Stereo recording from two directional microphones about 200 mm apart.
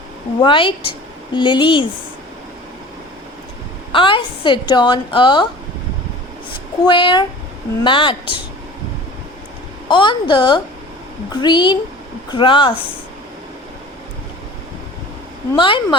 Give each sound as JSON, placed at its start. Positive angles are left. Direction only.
{"t": 0.4, "sound": "a woman's voice", "side_deg": 25}
{"t": 3.9, "sound": "speech", "side_deg": 25}
{"t": 6.8, "sound": "speech", "side_deg": 25}
{"t": 9.9, "sound": "speech", "side_deg": 25}
{"t": 15.5, "sound": "speech", "side_deg": 25}